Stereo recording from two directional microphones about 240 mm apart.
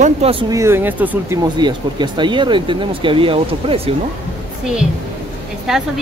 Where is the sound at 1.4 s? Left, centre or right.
Centre.